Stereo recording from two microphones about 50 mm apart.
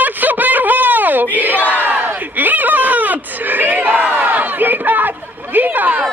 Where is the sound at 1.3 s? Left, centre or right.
Right.